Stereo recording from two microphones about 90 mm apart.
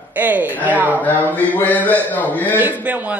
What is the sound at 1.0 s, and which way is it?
A man's voice, 20° left (ahead or behind).